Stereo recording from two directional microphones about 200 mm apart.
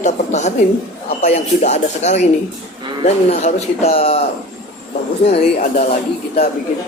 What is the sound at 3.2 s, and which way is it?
Speech, 35° left (ahead or behind).